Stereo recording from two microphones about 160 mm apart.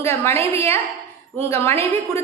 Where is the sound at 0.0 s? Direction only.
15° left (ahead or behind).